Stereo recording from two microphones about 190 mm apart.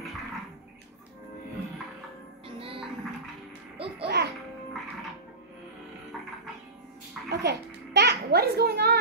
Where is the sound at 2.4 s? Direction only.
30° right (ahead or behind).